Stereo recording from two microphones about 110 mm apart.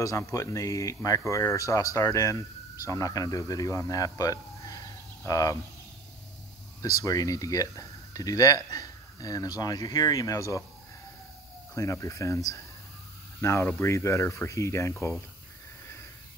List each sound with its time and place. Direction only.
0.0 s speech: 30° left (ahead or behind)
7.0 s speech: 30° left (ahead or behind)
11.7 s speech: 30° left (ahead or behind)